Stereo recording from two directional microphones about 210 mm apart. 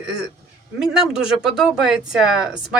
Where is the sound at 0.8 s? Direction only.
5° right (ahead or behind).